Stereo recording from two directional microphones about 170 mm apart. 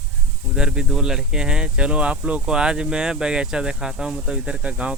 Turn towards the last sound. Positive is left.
turn(degrees=-5)  # may be behind; listen again after turning